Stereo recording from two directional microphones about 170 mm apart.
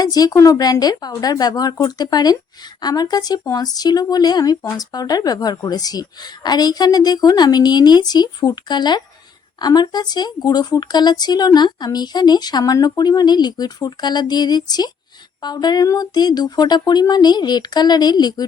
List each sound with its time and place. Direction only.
0.0 s speech: 20° left (ahead or behind)